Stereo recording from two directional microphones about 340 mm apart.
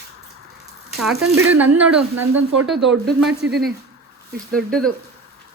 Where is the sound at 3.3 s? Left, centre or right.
Right.